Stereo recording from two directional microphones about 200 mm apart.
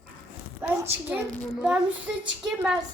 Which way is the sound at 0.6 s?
10° right (ahead or behind).